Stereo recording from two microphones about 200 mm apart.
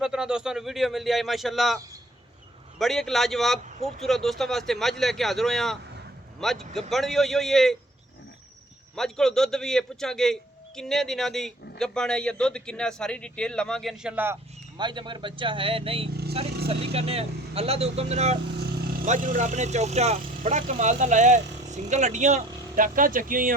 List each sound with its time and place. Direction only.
0.0 s a man's voice: 5° right (ahead or behind)
9.0 s a man's voice: centre (ahead or behind)
14.8 s speech: 25° right (ahead or behind); by 23.5 s 45° right (ahead or behind)